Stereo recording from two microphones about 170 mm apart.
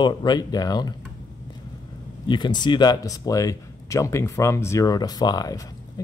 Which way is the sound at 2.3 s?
25° left (ahead or behind).